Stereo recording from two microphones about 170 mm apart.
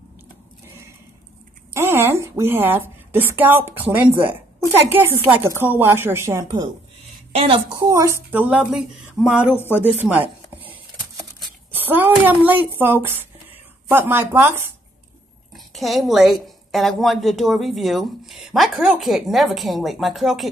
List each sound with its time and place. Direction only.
1.7 s a woman's voice: 15° right (ahead or behind)
7.3 s a woman's voice: 35° right (ahead or behind)
7.7 s a woman's voice: 20° right (ahead or behind)
11.7 s a woman's voice: 10° right (ahead or behind)
15.5 s a woman's voice: centre (ahead or behind)